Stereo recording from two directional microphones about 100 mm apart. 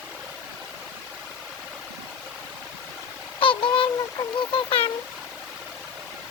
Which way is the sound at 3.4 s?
60° left (ahead or behind).